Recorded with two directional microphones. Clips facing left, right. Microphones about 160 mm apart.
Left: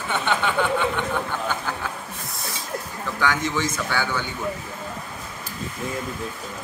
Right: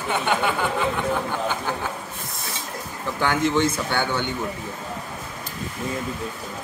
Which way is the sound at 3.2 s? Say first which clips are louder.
Right 3 dB; 25° right (ahead or behind).